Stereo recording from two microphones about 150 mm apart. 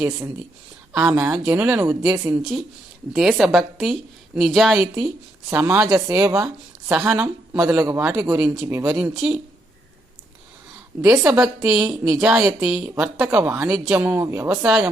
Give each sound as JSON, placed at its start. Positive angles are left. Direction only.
{"t": 0.9, "sound": "speech", "side_deg": -10}
{"t": 1.8, "sound": "speech", "side_deg": -20}
{"t": 2.4, "sound": "a woman's voice", "side_deg": 0}
{"t": 6.3, "sound": "a woman's voice", "side_deg": -5}
{"t": 11.0, "sound": "a woman's voice", "side_deg": -5}